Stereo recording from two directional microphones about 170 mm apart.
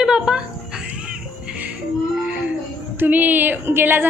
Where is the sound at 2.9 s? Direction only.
10° right (ahead or behind).